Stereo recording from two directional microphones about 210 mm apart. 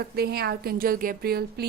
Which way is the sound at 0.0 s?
50° right (ahead or behind).